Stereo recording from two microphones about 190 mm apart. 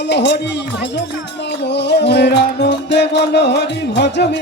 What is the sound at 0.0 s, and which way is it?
Music, 65° left (ahead or behind).